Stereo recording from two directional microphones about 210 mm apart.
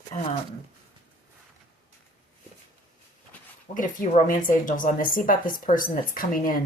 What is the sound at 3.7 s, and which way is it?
A woman's voice, 40° left (ahead or behind).